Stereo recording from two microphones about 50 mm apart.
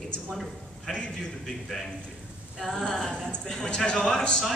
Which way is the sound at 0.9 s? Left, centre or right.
Centre.